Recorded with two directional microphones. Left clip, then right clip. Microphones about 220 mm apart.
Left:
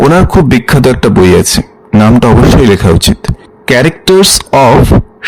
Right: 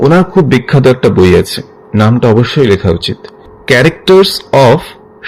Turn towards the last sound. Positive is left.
turn(degrees=45)  # may be behind; listen again after turning